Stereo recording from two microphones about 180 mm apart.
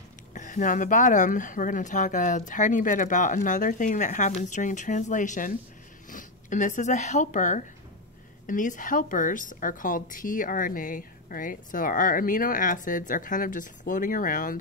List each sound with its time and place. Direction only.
0.3 s speech: 45° left (ahead or behind)